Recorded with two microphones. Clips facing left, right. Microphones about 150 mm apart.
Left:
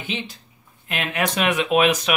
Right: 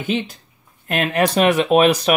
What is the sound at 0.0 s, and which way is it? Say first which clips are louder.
Speech: right 8 dB; 45° right (ahead or behind).